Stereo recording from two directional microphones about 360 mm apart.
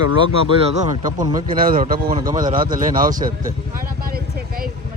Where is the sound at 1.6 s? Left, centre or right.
Right.